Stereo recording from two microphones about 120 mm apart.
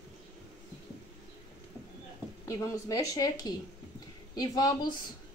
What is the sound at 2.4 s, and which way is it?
A woman's voice, 25° left (ahead or behind).